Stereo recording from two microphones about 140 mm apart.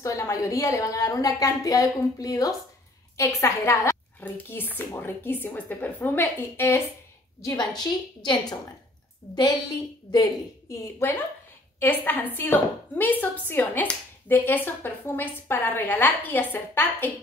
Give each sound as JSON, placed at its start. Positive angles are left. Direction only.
{"t": 0.0, "sound": "a woman's voice", "side_deg": 20}
{"t": 7.4, "sound": "a woman's voice", "side_deg": 30}
{"t": 10.7, "sound": "a woman's voice", "side_deg": 20}